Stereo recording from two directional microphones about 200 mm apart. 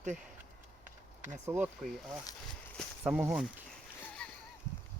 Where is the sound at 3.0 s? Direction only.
5° right (ahead or behind).